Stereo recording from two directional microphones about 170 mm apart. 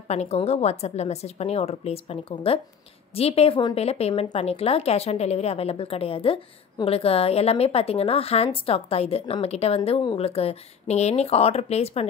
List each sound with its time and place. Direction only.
0.1 s speech: 40° left (ahead or behind)